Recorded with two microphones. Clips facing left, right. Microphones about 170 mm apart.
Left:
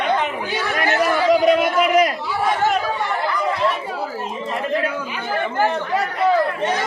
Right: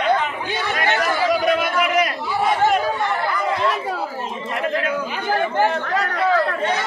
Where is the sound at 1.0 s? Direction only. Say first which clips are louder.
Left 6 dB; 15° left (ahead or behind).